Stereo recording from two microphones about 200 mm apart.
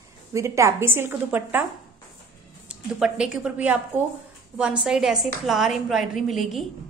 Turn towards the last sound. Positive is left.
turn(degrees=0)  # may be behind; listen again after turning